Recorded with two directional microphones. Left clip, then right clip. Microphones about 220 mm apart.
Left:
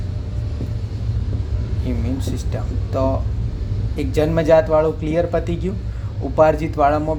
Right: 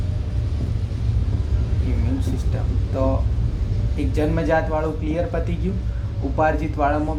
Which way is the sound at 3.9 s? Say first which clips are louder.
Left 5 dB; 50° left (ahead or behind).